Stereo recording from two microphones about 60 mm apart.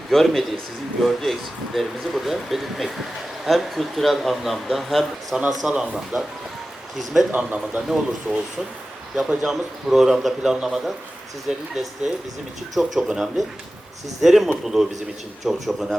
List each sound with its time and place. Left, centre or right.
0.1 s a man's voice: centre
5.6 s a man's voice: centre
7.3 s speech: right
7.8 s a man's voice: centre